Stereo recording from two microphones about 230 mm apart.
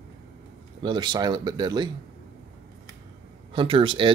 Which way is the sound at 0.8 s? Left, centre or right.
Centre.